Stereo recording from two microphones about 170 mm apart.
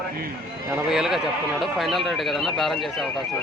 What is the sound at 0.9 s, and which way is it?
Speech, centre (ahead or behind).